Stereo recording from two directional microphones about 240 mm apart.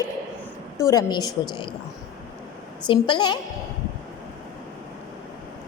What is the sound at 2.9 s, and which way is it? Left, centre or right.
Speech, centre.